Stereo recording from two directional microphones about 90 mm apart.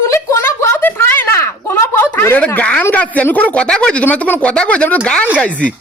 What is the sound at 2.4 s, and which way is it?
A man's voice, 15° left (ahead or behind).